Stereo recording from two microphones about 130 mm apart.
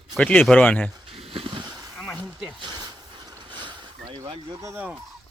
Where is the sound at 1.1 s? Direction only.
45° right (ahead or behind).